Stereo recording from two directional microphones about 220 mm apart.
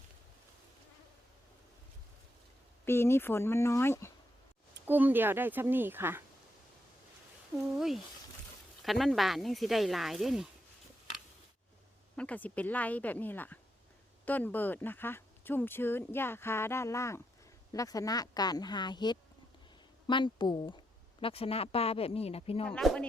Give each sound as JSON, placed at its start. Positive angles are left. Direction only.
{"t": 2.8, "sound": "speech", "side_deg": 10}
{"t": 4.9, "sound": "a woman's voice", "side_deg": -10}
{"t": 7.7, "sound": "speech", "side_deg": 0}
{"t": 12.1, "sound": "a woman's voice", "side_deg": 5}
{"t": 22.6, "sound": "speech", "side_deg": 5}